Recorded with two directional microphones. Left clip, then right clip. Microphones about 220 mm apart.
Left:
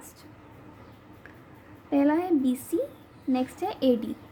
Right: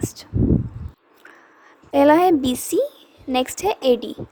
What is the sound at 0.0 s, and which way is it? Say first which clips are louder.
Speech: right 19 dB; 40° right (ahead or behind).